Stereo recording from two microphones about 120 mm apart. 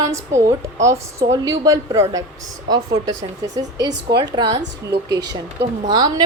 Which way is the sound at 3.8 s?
35° right (ahead or behind).